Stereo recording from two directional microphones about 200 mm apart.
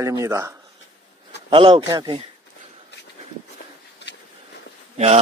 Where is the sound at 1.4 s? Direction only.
25° right (ahead or behind).